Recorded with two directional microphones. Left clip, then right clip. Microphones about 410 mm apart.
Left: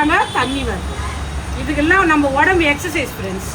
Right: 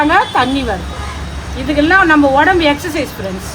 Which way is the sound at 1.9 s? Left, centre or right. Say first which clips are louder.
Right 4 dB; centre.